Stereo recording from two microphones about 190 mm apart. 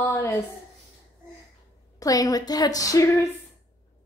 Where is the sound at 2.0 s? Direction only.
20° left (ahead or behind).